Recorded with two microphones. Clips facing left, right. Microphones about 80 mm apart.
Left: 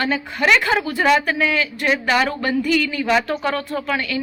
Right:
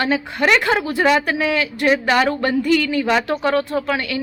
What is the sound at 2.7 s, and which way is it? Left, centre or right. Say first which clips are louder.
A woman's voice: right 2 dB; right.